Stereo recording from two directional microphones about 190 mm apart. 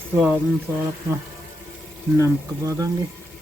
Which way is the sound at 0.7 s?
15° right (ahead or behind).